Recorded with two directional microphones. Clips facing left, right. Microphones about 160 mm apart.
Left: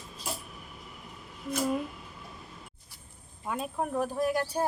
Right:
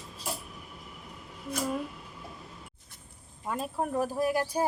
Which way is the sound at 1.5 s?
5° left (ahead or behind).